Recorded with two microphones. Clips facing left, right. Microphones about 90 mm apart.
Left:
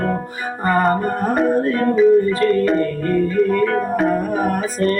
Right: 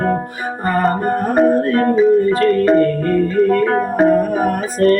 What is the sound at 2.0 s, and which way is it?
Music, centre (ahead or behind).